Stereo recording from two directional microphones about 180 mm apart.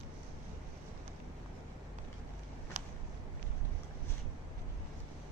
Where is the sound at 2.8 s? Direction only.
40° right (ahead or behind).